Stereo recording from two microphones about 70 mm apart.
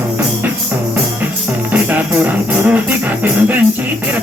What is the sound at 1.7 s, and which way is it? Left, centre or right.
Music, right.